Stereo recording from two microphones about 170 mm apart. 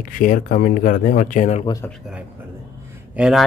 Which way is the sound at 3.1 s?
5° right (ahead or behind).